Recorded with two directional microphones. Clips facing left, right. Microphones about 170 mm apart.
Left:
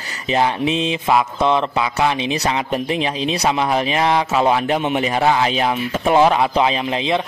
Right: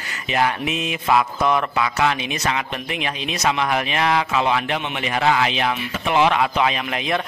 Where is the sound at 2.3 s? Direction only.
35° left (ahead or behind).